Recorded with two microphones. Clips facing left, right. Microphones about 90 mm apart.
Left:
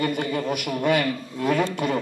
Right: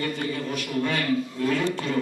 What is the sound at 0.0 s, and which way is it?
A man's voice, 20° left (ahead or behind).